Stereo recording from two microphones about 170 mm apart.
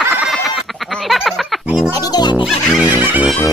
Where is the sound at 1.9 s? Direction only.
20° left (ahead or behind).